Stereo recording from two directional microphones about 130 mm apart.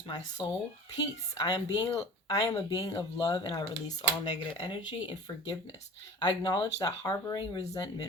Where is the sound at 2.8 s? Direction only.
35° left (ahead or behind).